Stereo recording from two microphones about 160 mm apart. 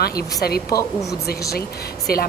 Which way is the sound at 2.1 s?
75° left (ahead or behind).